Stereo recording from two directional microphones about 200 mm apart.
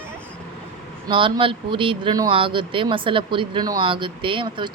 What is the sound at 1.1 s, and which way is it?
Speech, 25° right (ahead or behind).